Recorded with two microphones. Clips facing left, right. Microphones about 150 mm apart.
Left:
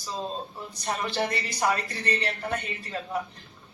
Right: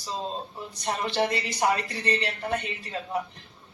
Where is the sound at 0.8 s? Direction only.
20° right (ahead or behind).